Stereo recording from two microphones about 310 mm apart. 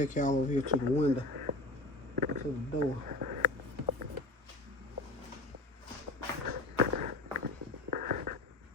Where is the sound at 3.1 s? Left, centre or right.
Right.